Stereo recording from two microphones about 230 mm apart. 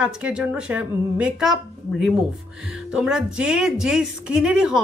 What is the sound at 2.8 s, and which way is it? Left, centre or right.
A woman's voice, centre.